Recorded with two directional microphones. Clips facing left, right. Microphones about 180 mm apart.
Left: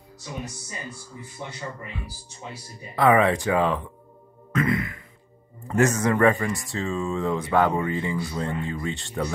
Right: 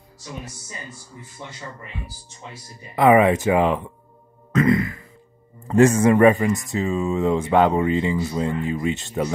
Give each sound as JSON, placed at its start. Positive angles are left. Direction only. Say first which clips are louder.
{"t": 3.0, "sound": "speech", "louder": "right 4 dB", "side_deg": -20}